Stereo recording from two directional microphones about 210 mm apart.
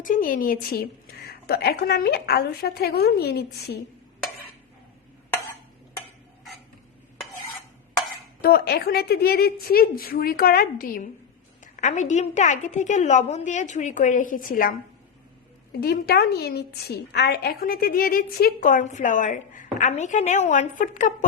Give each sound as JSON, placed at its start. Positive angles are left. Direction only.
{"t": 0.0, "sound": "a woman's voice", "side_deg": 40}
{"t": 8.4, "sound": "a woman's voice", "side_deg": 50}